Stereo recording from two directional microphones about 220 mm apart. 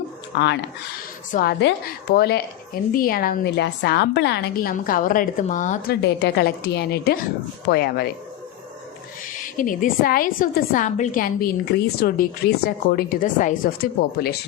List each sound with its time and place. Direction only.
0.3 s a woman's voice: 50° left (ahead or behind); by 6.0 s 35° left (ahead or behind)
6.0 s a woman's voice: 50° left (ahead or behind)
9.2 s a woman's voice: 40° left (ahead or behind)